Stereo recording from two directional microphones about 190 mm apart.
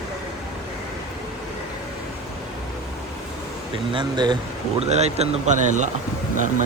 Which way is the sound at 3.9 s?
25° right (ahead or behind).